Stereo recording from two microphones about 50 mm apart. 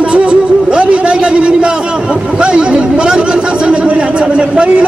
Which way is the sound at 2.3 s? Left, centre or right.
Right.